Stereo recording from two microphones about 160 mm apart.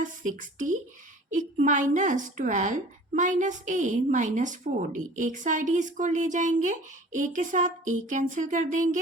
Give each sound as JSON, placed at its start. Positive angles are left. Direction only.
{"t": 0.0, "sound": "a woman's voice", "side_deg": -55}